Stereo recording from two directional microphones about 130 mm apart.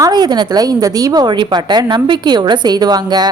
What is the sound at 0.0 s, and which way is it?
A woman's voice, 35° right (ahead or behind).